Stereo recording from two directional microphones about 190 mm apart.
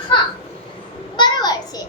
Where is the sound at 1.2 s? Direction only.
20° left (ahead or behind).